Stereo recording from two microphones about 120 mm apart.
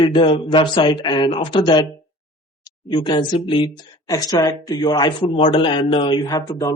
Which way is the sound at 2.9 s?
40° left (ahead or behind).